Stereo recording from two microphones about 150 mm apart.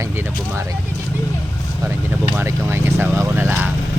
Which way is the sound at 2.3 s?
15° right (ahead or behind).